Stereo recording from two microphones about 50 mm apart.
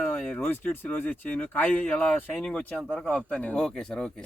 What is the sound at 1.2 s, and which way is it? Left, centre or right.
Speech, left.